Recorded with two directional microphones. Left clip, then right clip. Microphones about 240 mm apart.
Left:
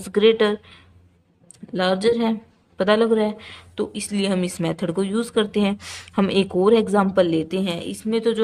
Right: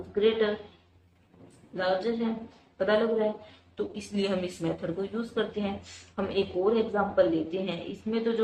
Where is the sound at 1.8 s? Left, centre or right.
Left.